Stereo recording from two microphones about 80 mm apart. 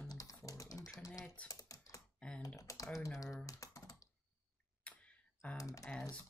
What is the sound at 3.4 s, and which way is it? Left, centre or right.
Computer keyboard, left.